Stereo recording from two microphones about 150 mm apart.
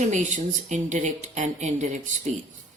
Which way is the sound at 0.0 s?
55° right (ahead or behind).